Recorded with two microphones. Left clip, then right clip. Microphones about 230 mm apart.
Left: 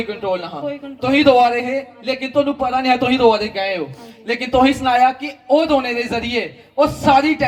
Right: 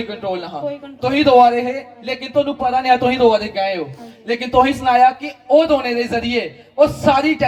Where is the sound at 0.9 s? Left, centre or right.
Left.